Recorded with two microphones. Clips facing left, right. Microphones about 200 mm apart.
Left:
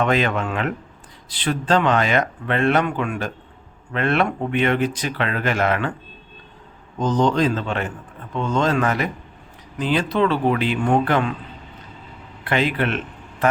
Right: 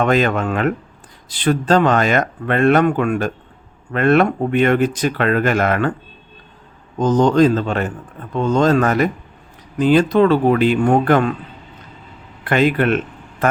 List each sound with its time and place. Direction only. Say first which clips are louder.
0.0 s speech: right 4 dB; 45° right (ahead or behind)
7.0 s speech: right 6 dB; 45° right (ahead or behind)
12.5 s speech: right 6 dB; 50° right (ahead or behind)